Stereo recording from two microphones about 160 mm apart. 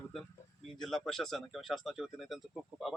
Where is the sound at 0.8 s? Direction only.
Centre (ahead or behind).